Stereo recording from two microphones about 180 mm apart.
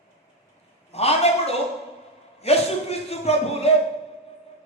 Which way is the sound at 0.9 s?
35° left (ahead or behind).